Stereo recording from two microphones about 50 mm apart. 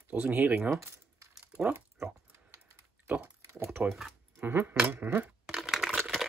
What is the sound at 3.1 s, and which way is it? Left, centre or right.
Pig, right.